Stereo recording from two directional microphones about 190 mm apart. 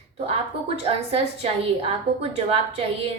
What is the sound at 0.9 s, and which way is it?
A woman's voice, 30° right (ahead or behind).